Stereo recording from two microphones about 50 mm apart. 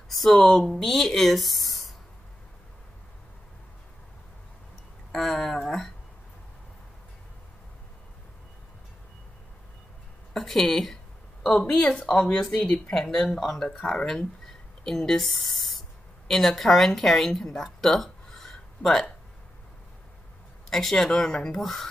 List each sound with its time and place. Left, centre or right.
0.1 s speech: centre
5.1 s speech: centre
10.3 s speech: centre
12.6 s speech: left
13.2 s speech: centre
20.7 s speech: centre